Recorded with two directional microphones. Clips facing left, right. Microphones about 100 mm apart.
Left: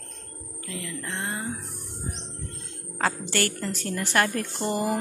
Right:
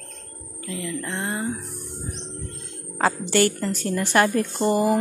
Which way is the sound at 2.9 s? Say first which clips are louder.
Right 6 dB; 25° right (ahead or behind).